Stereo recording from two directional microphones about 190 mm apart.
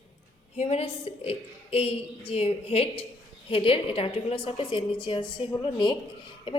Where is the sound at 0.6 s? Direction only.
30° left (ahead or behind).